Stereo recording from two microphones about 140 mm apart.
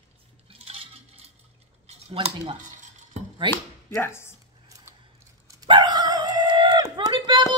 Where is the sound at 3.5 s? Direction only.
15° left (ahead or behind).